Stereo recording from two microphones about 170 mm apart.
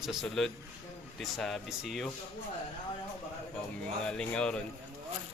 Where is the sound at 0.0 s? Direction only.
Centre (ahead or behind).